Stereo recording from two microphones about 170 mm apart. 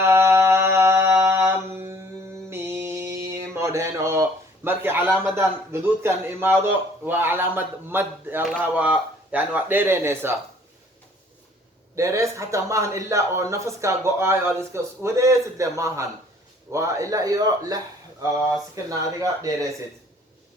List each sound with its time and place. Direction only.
0.0 s mantra: 15° right (ahead or behind)
5.4 s a man's voice: 15° right (ahead or behind)
11.9 s a man's voice: 15° right (ahead or behind)
18.9 s a man's voice: 20° right (ahead or behind)